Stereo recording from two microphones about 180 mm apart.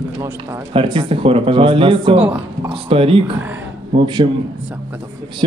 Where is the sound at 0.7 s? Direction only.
30° right (ahead or behind).